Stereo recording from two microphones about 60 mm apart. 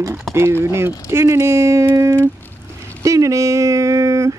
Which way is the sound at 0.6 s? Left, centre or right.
Right.